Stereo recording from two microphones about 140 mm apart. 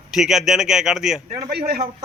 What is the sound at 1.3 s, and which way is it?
Speech, 55° right (ahead or behind).